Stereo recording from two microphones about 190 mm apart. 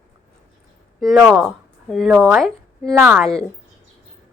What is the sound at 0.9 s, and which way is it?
Speech, centre (ahead or behind).